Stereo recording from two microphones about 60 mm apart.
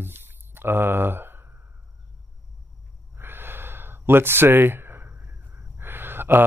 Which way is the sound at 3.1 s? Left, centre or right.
Right.